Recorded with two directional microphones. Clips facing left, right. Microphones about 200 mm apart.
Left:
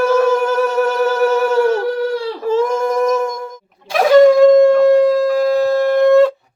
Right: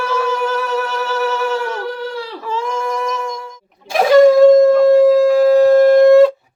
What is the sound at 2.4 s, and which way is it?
Female singing, 45° left (ahead or behind).